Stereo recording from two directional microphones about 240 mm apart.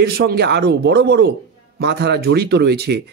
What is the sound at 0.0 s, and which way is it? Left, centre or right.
A man's voice, right.